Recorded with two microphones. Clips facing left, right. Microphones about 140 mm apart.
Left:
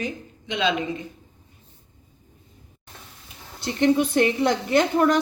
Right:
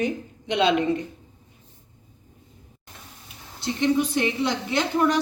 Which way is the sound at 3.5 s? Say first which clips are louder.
Left 2 dB; 55° left (ahead or behind).